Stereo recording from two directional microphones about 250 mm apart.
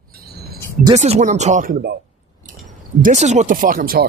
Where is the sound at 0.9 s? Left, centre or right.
Right.